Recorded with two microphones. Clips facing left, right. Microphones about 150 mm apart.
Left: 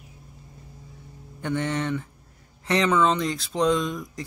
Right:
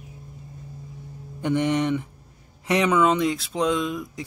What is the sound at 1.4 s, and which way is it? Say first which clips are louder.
Speech: right 5 dB; 15° right (ahead or behind).